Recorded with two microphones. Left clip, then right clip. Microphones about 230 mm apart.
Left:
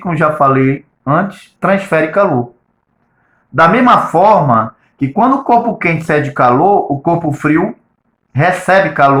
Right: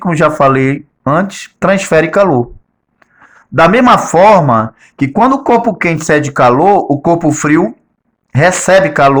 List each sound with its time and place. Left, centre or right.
0.0 s speech: right
3.5 s speech: right